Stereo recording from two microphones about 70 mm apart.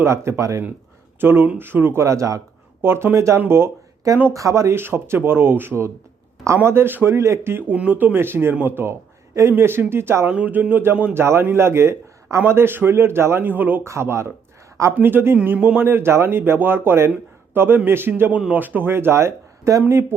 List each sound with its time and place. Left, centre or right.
0.0 s speech: right
1.2 s speech: right
2.0 s speech: right
2.8 s speech: right
4.3 s speech: right
7.7 s a man's voice: right
10.2 s a man's voice: right
13.8 s a man's voice: right